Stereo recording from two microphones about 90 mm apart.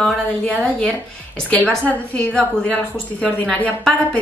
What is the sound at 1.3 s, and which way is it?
Speech, 15° left (ahead or behind).